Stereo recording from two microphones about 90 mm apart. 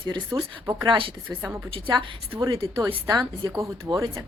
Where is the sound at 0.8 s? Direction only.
70° right (ahead or behind); by 2.6 s 85° right.